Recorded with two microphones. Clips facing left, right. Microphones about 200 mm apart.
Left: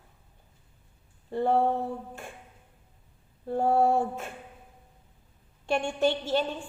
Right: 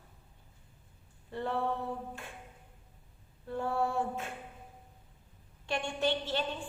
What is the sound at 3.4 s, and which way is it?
Speech, 45° left (ahead or behind).